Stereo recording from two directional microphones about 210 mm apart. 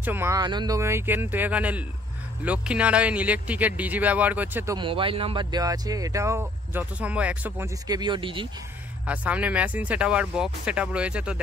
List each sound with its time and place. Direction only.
0.0 s speech: 10° right (ahead or behind)
4.7 s speech: 25° right (ahead or behind)
9.0 s speech: 5° right (ahead or behind)